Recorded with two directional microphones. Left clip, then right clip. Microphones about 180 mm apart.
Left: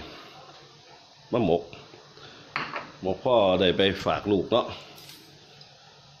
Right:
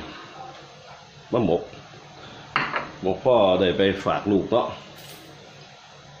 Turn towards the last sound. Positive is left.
turn(degrees=55)  # may be behind; listen again after turning